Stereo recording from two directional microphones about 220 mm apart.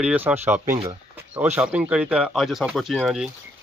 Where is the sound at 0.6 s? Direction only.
35° right (ahead or behind).